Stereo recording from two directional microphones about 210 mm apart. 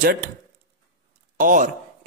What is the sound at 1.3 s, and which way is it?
Speech, 40° right (ahead or behind).